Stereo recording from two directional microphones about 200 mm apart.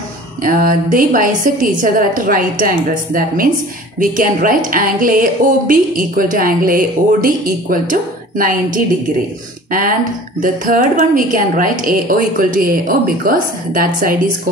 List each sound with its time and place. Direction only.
0.4 s speech: 45° right (ahead or behind)